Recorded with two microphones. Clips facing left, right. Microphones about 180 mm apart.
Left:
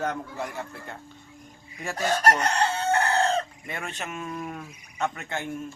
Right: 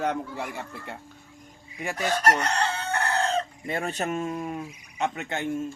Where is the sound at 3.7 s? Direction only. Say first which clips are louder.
Right 9 dB; 35° right (ahead or behind).